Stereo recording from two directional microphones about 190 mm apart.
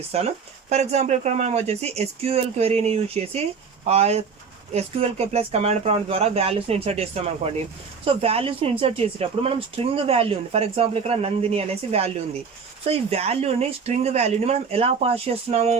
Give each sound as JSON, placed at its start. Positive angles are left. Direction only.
{"t": 0.1, "sound": "speech", "side_deg": -35}